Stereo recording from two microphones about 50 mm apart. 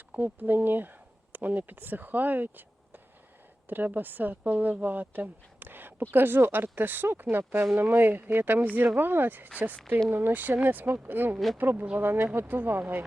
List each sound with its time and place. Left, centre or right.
0.1 s speech: right